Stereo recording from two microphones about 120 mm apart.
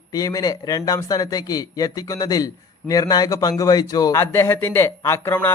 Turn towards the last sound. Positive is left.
turn(degrees=20)  # may be behind; listen again after turning